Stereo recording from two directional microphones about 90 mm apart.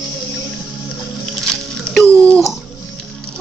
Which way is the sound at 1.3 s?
5° left (ahead or behind).